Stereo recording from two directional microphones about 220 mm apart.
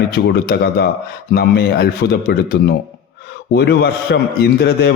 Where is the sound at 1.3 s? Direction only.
50° left (ahead or behind).